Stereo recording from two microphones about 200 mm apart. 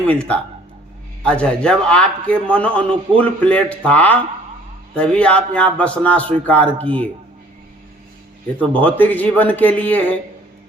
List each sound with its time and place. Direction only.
0.1 s a man's voice: 5° left (ahead or behind)
6.8 s speech: 25° right (ahead or behind)
8.8 s a man's voice: 10° left (ahead or behind)